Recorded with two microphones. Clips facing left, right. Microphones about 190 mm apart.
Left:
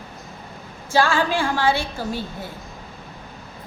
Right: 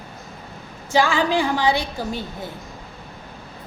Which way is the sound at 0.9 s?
20° right (ahead or behind).